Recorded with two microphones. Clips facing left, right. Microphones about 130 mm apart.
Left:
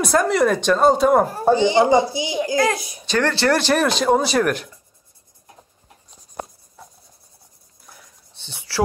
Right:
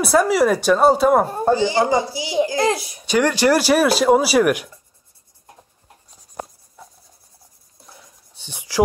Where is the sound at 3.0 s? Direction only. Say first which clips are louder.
Right 3 dB; 10° right (ahead or behind).